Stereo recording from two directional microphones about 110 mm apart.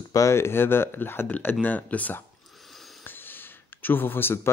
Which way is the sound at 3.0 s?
20° left (ahead or behind).